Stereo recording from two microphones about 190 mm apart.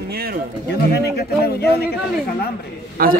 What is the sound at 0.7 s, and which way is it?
A man's voice, 60° left (ahead or behind).